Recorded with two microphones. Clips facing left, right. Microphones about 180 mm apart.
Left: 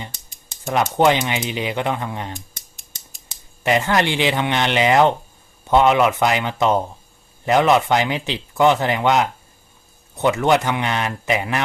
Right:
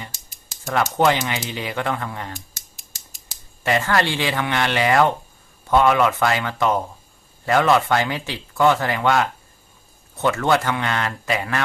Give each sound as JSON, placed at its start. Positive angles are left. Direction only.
{"t": 0.6, "sound": "speech", "side_deg": 20}
{"t": 3.6, "sound": "speech", "side_deg": 20}